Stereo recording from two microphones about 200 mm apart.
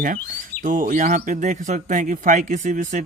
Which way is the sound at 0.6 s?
40° right (ahead or behind).